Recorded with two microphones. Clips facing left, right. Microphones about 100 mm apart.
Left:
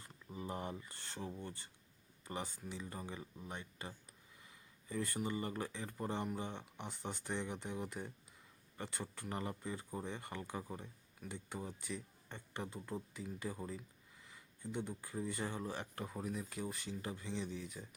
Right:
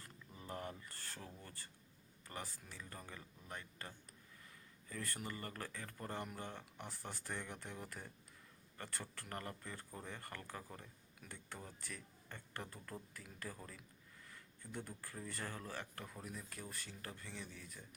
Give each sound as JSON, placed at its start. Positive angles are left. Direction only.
{"t": 0.0, "sound": "speech", "side_deg": 20}
{"t": 6.8, "sound": "speech", "side_deg": 0}
{"t": 7.3, "sound": "speech", "side_deg": 20}
{"t": 14.3, "sound": "a sound", "side_deg": 10}
{"t": 14.8, "sound": "speech", "side_deg": 15}